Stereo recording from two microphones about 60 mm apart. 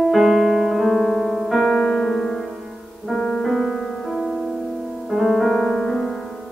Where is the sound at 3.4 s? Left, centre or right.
Centre.